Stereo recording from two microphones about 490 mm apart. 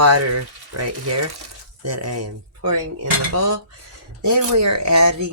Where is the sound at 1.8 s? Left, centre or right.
Right.